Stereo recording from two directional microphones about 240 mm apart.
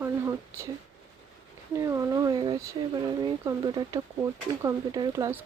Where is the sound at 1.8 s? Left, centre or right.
Centre.